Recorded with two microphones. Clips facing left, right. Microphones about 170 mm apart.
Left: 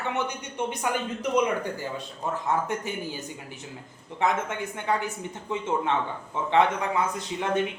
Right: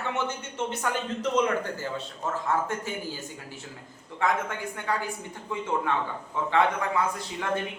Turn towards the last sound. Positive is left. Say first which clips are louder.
# left 3 dB
turn(degrees=20)  # may be behind; listen again after turning